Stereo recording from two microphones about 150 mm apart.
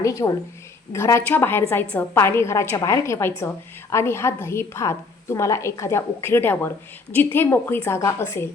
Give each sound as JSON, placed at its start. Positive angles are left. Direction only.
{"t": 0.0, "sound": "a woman's voice", "side_deg": 20}